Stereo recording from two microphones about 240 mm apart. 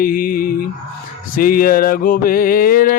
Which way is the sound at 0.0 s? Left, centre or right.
Left.